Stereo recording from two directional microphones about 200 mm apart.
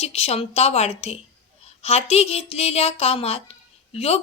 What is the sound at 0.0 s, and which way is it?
A woman's voice, 30° left (ahead or behind).